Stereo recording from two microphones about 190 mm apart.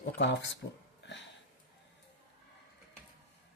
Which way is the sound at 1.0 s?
65° left (ahead or behind).